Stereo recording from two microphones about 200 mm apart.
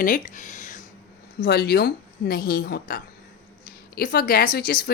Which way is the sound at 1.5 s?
55° left (ahead or behind).